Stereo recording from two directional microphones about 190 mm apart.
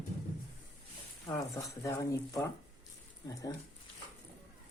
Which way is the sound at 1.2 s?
15° left (ahead or behind).